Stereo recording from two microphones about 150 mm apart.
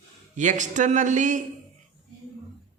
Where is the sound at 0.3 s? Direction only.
55° right (ahead or behind).